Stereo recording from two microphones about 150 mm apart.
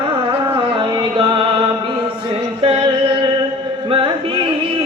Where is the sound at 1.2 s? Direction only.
30° right (ahead or behind).